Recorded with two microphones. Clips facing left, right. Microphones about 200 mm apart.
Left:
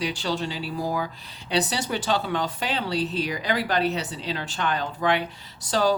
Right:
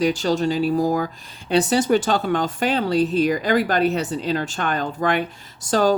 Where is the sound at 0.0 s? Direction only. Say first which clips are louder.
Right 8 dB; 45° right (ahead or behind).